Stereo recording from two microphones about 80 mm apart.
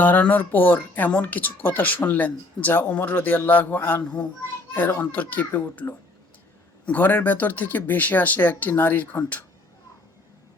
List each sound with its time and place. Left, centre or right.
0.0 s speech: left
4.0 s a child's voice: centre
4.7 s speech: left